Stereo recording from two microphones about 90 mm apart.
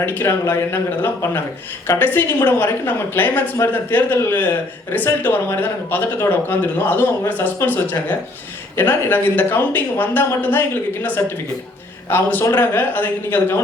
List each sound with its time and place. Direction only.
0.0 s speech: 25° left (ahead or behind)